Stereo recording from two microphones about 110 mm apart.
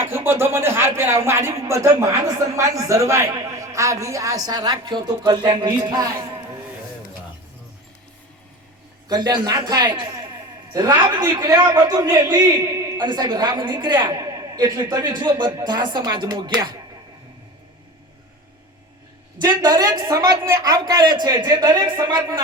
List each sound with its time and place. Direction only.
0.0 s a man's voice: 20° right (ahead or behind); by 6.1 s 45° right (ahead or behind)
9.0 s a man's voice: 40° right (ahead or behind)
13.1 s a woman's voice: 45° right (ahead or behind)
19.4 s a man's voice: 40° right (ahead or behind)